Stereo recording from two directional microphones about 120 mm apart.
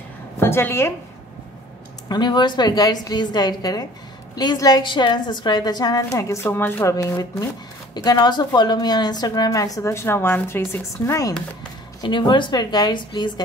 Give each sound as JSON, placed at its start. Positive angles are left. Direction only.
{"t": 0.4, "sound": "a woman's voice", "side_deg": 20}
{"t": 2.0, "sound": "a woman's voice", "side_deg": 35}
{"t": 12.0, "sound": "a woman's voice", "side_deg": 40}